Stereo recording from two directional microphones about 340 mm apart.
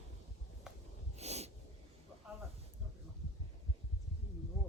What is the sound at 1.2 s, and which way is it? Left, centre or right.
Snort, centre.